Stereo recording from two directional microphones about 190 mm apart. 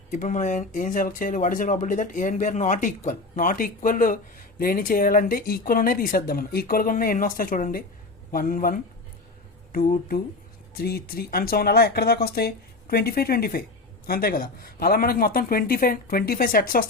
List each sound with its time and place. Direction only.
0.1 s speech: 40° left (ahead or behind)